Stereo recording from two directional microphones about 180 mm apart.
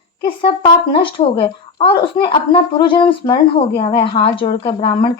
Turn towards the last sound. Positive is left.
turn(degrees=30)  # may be behind; listen again after turning